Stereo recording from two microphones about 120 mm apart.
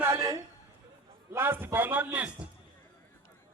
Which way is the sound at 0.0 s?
25° right (ahead or behind).